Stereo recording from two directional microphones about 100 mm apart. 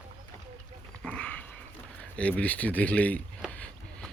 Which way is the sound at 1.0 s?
10° left (ahead or behind).